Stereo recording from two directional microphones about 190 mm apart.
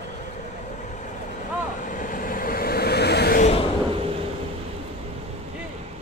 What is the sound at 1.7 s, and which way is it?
Vehicle, 45° left (ahead or behind).